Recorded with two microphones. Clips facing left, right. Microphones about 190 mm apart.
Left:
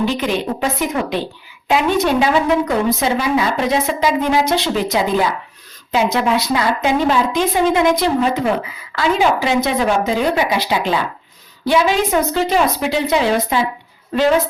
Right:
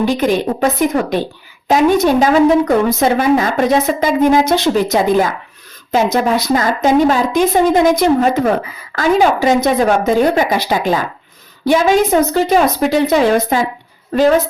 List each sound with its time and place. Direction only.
0.0 s a woman's voice: 45° right (ahead or behind)